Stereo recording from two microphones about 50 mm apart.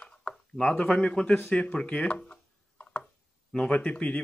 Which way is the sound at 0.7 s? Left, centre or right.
Centre.